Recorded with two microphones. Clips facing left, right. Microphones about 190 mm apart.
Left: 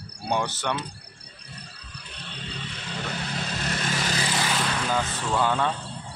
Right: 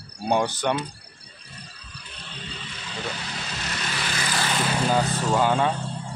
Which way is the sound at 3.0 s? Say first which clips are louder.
Left 2 dB; 50° left (ahead or behind).